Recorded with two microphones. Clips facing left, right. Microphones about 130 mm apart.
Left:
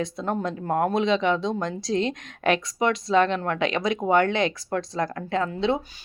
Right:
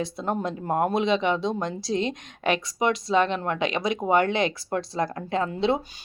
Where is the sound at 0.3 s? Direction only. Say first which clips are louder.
Even; 15° right (ahead or behind).